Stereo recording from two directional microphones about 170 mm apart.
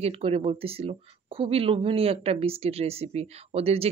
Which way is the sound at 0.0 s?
35° right (ahead or behind).